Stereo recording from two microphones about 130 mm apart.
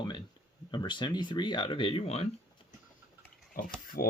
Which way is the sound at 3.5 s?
90° left.